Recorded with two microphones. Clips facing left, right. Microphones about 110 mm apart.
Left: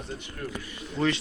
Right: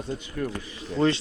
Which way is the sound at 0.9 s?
30° right (ahead or behind).